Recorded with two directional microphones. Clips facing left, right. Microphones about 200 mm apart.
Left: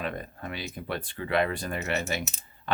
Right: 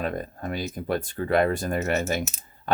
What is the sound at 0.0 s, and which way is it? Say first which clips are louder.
Speech: right 5 dB; 45° right (ahead or behind).